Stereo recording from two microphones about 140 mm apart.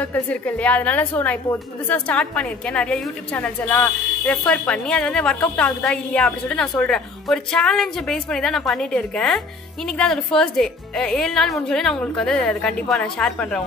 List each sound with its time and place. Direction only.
0.0 s a woman's voice: 10° left (ahead or behind)